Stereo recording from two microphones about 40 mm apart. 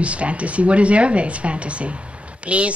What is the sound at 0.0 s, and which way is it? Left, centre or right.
Speech, right.